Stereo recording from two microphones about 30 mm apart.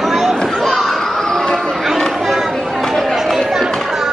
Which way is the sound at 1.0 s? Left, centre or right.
Centre.